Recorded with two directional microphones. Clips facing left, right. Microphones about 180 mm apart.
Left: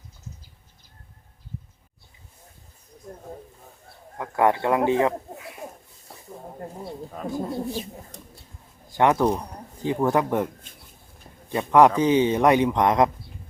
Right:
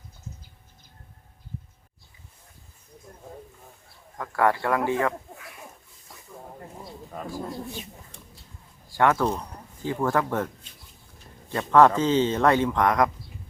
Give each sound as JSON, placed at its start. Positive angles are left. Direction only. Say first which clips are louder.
{"t": 4.2, "sound": "speech", "louder": "left 2 dB", "side_deg": 20}
{"t": 7.3, "sound": "speech", "louder": "left 6 dB", "side_deg": 20}
{"t": 7.7, "sound": "speech", "louder": "left 7 dB", "side_deg": 35}
{"t": 8.9, "sound": "a man's voice", "louder": "left 3 dB", "side_deg": 20}